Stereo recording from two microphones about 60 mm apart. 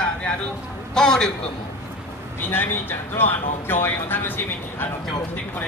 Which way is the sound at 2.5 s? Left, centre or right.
Left.